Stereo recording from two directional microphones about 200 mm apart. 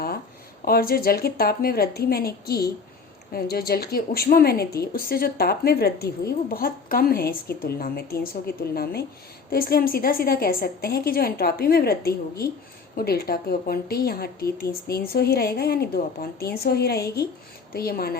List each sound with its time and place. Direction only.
0.6 s a woman's voice: 50° left (ahead or behind)